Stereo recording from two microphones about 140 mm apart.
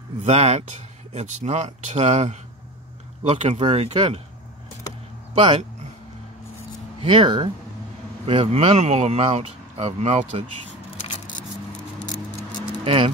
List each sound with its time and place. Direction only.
0.2 s speech: 50° right (ahead or behind)
3.6 s speech: 40° right (ahead or behind)
5.3 s speech: 35° right (ahead or behind)
7.0 s speech: 35° right (ahead or behind); by 10.4 s 55° right (ahead or behind)
12.1 s a sound: 30° left (ahead or behind)
12.8 s speech: 40° right (ahead or behind)